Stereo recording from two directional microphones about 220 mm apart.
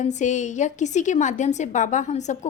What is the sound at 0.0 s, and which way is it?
A woman's voice, 35° left (ahead or behind).